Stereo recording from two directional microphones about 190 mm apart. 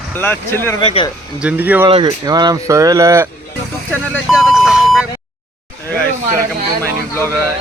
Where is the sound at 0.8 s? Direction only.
30° left (ahead or behind).